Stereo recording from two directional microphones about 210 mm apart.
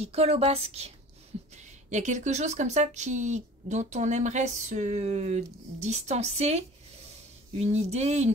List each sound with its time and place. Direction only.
0.0 s speech: 30° right (ahead or behind)